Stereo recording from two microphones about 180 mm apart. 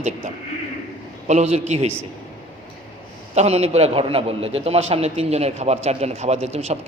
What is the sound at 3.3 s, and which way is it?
A man's voice, 35° right (ahead or behind).